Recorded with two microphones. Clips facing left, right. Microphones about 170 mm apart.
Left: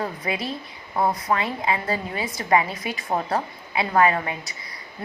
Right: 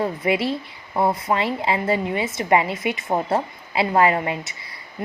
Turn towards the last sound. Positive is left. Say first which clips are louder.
# right 3 dB
turn(degrees=-25)  # may be behind; listen again after turning